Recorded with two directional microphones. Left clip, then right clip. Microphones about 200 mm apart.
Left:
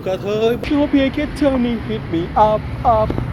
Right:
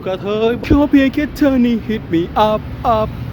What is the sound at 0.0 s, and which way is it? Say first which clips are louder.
Speech: right 1 dB; 30° right (ahead or behind).